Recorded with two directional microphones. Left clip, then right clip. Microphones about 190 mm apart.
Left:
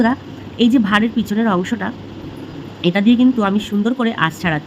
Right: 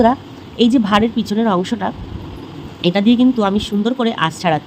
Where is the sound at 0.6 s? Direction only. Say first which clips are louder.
Right 1 dB; 10° right (ahead or behind).